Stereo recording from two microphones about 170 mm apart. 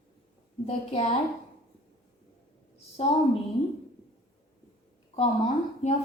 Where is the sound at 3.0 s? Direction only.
35° left (ahead or behind).